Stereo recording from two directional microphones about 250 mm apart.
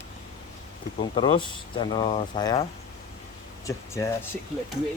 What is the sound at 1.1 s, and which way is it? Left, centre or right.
Speech, centre.